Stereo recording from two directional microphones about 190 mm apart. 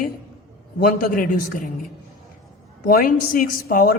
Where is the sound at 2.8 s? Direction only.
45° left (ahead or behind).